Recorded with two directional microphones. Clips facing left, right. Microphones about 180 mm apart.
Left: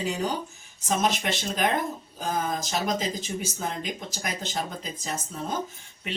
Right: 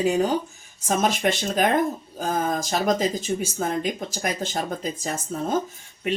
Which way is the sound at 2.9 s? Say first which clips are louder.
Right 6 dB; 50° right (ahead or behind).